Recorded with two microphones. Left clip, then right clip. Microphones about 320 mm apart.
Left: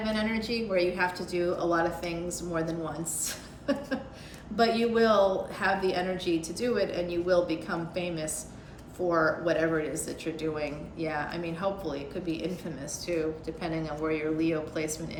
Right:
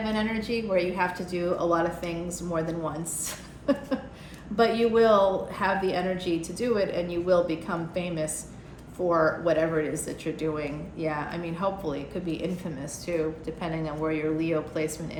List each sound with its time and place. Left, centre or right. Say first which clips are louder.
0.0 s a woman's voice: right 1 dB; centre